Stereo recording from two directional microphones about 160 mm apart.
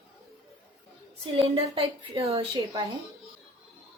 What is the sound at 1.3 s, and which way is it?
A woman's voice, 35° right (ahead or behind).